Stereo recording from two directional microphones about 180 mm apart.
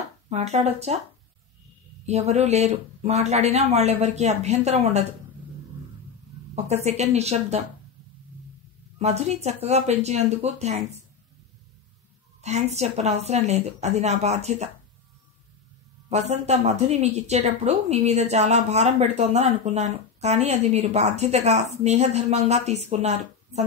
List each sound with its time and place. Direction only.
0.3 s a woman's voice: 40° right (ahead or behind)
2.0 s a woman's voice: 35° right (ahead or behind)
6.5 s a woman's voice: 40° right (ahead or behind)
8.9 s a woman's voice: 35° right (ahead or behind)
12.4 s a woman's voice: 40° right (ahead or behind)
16.1 s a woman's voice: 40° right (ahead or behind)